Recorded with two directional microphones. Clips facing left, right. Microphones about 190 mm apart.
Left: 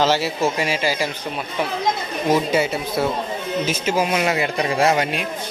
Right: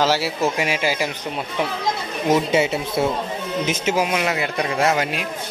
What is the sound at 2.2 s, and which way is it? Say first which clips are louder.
Speech: right 1 dB; 20° right (ahead or behind).